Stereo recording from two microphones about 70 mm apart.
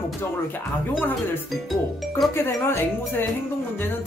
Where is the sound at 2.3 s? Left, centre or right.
Left.